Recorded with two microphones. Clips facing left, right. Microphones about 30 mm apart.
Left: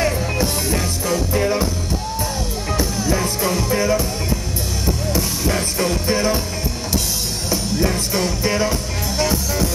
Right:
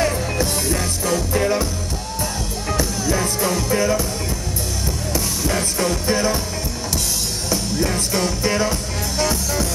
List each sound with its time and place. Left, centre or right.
0.0 s music: centre
2.7 s music: centre
5.5 s music: centre
7.4 s music: centre